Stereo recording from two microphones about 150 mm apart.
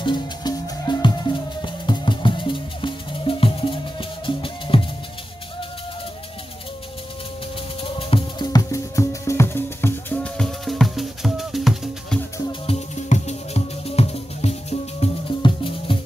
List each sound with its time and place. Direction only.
0.0 s music: 30° left (ahead or behind)
7.8 s music: 35° left (ahead or behind); by 12.2 s centre (ahead or behind)
12.6 s music: 50° left (ahead or behind)